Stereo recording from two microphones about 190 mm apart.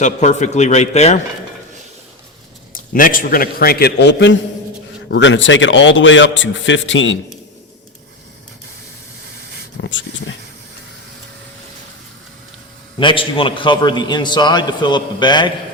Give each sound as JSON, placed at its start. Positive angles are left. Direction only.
{"t": 0.0, "sound": "a man's voice", "side_deg": 40}
{"t": 2.7, "sound": "a man's voice", "side_deg": 45}
{"t": 9.8, "sound": "a man's voice", "side_deg": 75}
{"t": 13.0, "sound": "a man's voice", "side_deg": 25}